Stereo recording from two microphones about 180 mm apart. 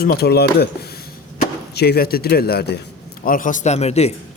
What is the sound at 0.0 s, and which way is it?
Speech, 60° left (ahead or behind).